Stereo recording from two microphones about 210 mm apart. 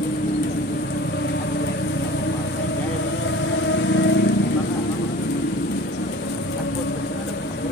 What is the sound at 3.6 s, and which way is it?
Music, 60° left (ahead or behind).